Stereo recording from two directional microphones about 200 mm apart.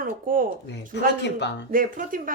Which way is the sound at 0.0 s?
45° right (ahead or behind).